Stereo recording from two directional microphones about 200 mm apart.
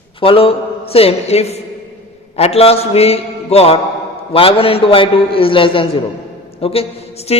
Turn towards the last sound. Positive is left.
turn(degrees=30)  # may be behind; listen again after turning